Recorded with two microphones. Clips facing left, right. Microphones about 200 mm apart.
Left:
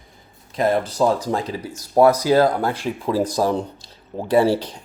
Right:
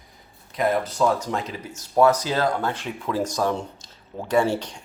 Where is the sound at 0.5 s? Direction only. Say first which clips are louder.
Left 3 dB; 30° left (ahead or behind).